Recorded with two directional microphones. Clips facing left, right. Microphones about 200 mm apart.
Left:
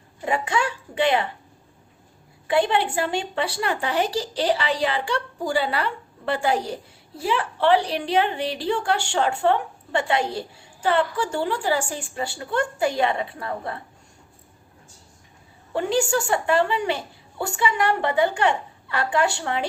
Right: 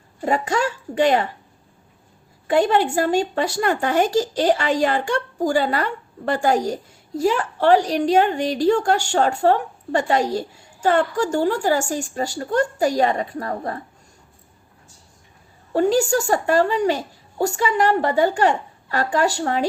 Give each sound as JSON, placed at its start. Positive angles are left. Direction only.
{"t": 0.2, "sound": "a woman's voice", "side_deg": -40}
{"t": 2.5, "sound": "a woman's voice", "side_deg": -45}
{"t": 15.7, "sound": "a woman's voice", "side_deg": -40}